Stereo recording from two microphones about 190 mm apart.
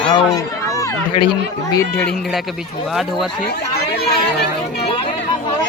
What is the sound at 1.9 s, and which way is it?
A man's voice, 5° left (ahead or behind).